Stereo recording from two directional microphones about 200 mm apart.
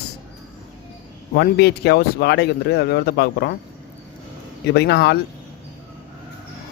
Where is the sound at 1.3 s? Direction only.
55° left (ahead or behind).